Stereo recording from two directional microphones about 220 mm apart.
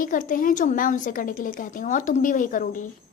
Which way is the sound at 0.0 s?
40° left (ahead or behind).